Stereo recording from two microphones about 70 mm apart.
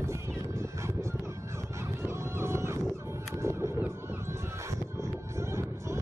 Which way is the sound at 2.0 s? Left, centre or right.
Right.